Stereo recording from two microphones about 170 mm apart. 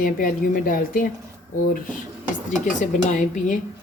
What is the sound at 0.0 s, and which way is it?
Speech, 55° left (ahead or behind).